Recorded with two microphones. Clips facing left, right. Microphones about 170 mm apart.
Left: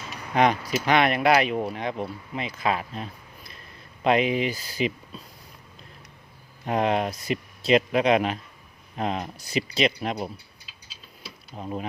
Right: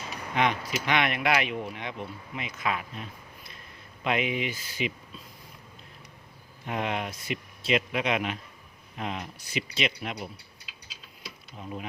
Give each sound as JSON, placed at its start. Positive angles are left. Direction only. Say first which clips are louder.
{"t": 0.3, "sound": "speech", "louder": "left 6 dB", "side_deg": 40}
{"t": 6.7, "sound": "speech", "louder": "left 7 dB", "side_deg": 35}
{"t": 11.5, "sound": "speech", "louder": "left 6 dB", "side_deg": 40}